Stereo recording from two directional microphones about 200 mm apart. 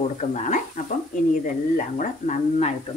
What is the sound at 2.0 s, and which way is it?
Speech, 35° left (ahead or behind).